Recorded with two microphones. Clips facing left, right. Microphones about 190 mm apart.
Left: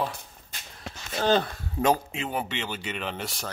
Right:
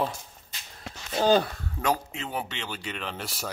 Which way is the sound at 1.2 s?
10° right (ahead or behind).